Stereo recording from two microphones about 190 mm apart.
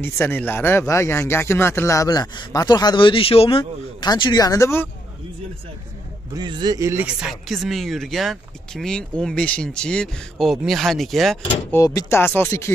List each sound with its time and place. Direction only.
0.0 s speech: 10° left (ahead or behind)
6.3 s speech: 25° right (ahead or behind)
7.2 s speech: centre (ahead or behind)
11.7 s speech: 20° left (ahead or behind)